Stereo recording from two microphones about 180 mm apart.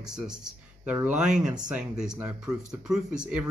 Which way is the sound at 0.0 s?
5° right (ahead or behind).